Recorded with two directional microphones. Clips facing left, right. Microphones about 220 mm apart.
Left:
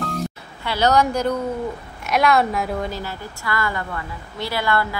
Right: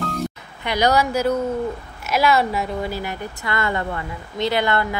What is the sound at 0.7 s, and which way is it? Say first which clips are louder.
A woman's voice: even; 15° right (ahead or behind).